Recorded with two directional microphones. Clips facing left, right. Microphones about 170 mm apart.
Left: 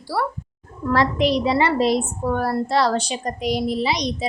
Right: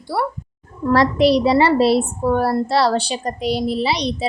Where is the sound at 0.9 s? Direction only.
35° right (ahead or behind).